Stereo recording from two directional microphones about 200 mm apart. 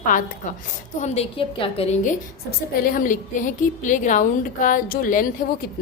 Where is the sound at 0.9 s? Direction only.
35° left (ahead or behind).